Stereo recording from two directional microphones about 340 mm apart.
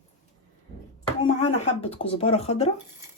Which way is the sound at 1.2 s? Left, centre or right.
Centre.